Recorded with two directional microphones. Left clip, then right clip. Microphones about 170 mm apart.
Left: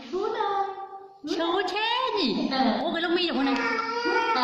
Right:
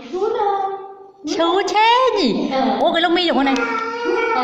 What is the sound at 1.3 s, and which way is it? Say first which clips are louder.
A woman's voice: right 9 dB; 40° right (ahead or behind).